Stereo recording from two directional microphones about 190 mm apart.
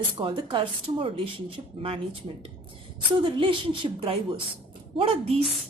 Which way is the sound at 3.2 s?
25° right (ahead or behind).